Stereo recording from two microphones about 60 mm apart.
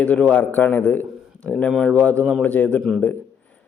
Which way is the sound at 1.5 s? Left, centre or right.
Centre.